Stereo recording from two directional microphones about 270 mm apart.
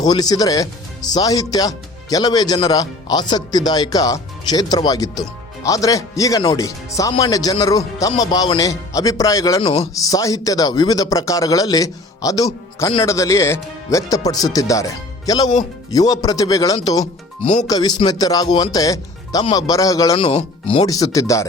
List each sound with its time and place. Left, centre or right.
0.0 s speech: centre
17.0 s speech: left
17.7 s speech: centre